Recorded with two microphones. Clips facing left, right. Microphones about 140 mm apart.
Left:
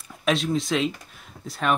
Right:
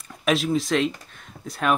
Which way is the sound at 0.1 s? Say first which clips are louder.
Right 1 dB; centre (ahead or behind).